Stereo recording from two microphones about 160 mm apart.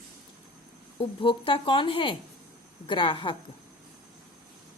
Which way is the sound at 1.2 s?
30° left (ahead or behind).